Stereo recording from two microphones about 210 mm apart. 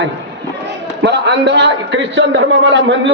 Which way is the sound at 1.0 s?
55° right (ahead or behind).